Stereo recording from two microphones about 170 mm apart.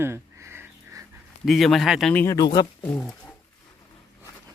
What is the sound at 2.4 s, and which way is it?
Speech, 25° left (ahead or behind).